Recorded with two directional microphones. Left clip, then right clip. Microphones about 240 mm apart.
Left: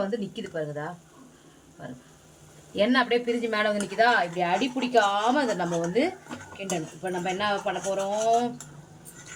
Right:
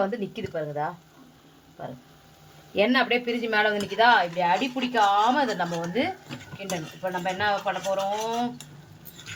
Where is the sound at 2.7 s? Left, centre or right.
Right.